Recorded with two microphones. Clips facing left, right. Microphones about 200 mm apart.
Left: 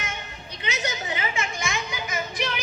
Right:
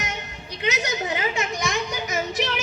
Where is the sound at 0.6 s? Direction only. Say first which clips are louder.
Right 5 dB; 70° right (ahead or behind).